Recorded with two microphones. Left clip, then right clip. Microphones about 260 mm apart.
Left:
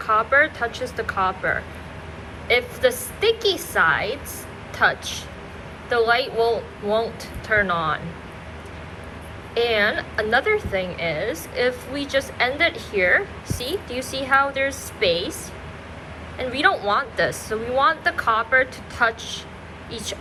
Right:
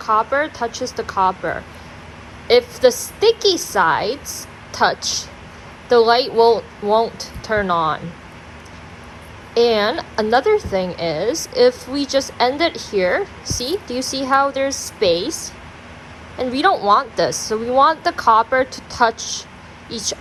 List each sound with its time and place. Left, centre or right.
0.0 s a woman's voice: centre
9.6 s a woman's voice: centre
16.4 s speech: centre